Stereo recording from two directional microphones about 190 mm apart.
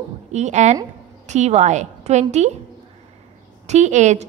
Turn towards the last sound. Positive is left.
turn(degrees=-40)  # may be behind; listen again after turning